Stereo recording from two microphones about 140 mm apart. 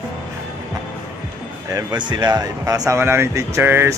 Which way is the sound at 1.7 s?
30° right (ahead or behind).